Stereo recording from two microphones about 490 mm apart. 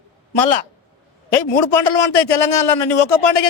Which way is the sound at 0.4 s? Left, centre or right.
Left.